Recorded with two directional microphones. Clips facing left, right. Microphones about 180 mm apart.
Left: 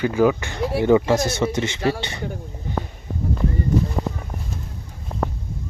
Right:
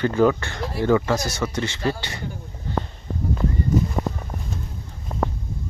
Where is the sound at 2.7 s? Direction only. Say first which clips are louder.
Right 1 dB; 10° left (ahead or behind).